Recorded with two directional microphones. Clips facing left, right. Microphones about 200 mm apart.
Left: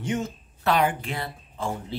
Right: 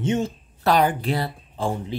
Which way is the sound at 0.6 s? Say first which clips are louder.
Right 4 dB; 35° right (ahead or behind).